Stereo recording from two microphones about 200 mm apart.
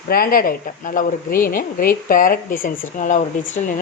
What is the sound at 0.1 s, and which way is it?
Speech, 45° left (ahead or behind).